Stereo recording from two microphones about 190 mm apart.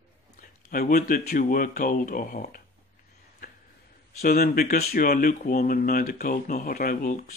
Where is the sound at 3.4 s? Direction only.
45° left (ahead or behind).